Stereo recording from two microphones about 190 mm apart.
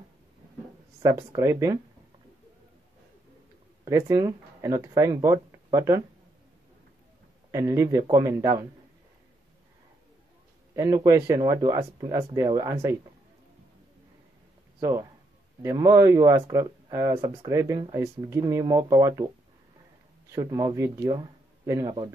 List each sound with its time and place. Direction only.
1.0 s speech: 15° right (ahead or behind)
3.8 s speech: 15° right (ahead or behind)
7.5 s speech: 15° right (ahead or behind)
10.7 s speech: 15° right (ahead or behind)
14.8 s speech: 15° right (ahead or behind)
20.2 s speech: 15° right (ahead or behind)